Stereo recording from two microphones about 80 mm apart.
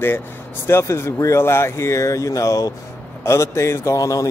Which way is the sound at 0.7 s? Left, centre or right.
Left.